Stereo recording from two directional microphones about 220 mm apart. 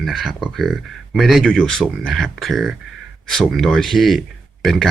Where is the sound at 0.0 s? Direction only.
Centre (ahead or behind).